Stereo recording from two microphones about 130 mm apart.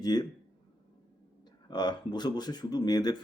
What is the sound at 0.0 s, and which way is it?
Speech, 30° left (ahead or behind).